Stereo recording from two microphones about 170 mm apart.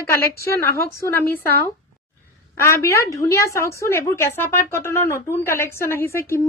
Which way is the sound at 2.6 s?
15° left (ahead or behind).